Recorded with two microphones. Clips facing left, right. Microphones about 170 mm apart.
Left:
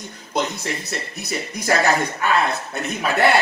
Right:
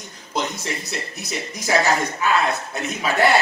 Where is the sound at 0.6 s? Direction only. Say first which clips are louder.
Left 1 dB; centre (ahead or behind).